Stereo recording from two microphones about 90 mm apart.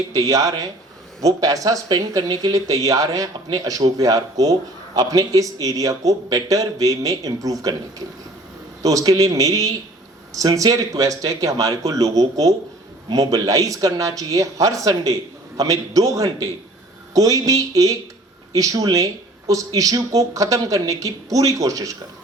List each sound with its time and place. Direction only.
0.1 s speech: 40° right (ahead or behind)